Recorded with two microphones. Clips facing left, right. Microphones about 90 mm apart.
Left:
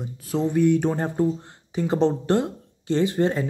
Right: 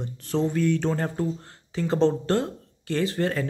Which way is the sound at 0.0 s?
10° left (ahead or behind).